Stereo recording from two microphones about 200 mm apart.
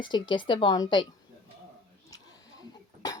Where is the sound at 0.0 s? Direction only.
25° left (ahead or behind).